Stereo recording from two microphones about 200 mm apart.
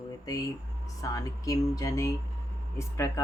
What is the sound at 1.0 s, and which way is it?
Speech, 15° left (ahead or behind).